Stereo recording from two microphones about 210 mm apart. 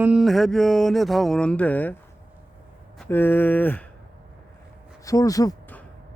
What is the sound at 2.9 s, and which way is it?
Speech, 10° left (ahead or behind).